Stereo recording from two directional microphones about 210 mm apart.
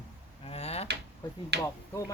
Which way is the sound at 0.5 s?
30° left (ahead or behind).